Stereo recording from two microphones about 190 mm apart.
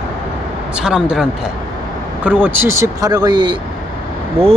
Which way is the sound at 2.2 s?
10° right (ahead or behind).